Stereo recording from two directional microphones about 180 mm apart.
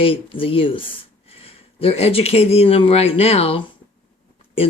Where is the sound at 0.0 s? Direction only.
30° left (ahead or behind).